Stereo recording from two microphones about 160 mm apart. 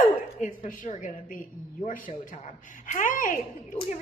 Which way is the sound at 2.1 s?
40° left (ahead or behind).